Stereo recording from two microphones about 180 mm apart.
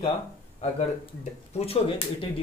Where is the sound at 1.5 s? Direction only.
35° left (ahead or behind).